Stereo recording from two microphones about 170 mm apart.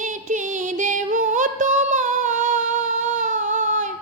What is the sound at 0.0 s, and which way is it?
Music, 50° right (ahead or behind).